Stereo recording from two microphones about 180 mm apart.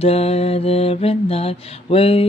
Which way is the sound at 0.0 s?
35° left (ahead or behind).